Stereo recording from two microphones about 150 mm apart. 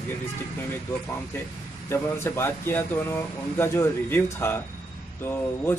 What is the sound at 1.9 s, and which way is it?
Speech, 15° left (ahead or behind).